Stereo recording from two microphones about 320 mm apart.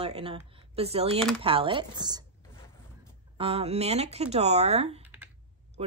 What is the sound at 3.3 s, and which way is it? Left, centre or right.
A woman's voice, centre.